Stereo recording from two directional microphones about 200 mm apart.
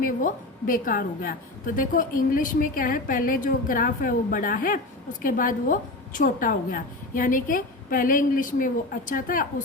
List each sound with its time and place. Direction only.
0.0 s a woman's voice: 45° left (ahead or behind)